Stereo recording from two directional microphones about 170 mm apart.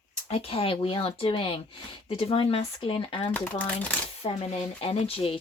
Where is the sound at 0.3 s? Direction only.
35° left (ahead or behind).